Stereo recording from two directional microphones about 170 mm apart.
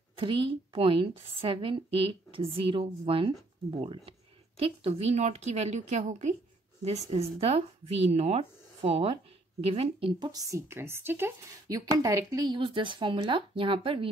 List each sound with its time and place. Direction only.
0.2 s a woman's voice: 30° right (ahead or behind)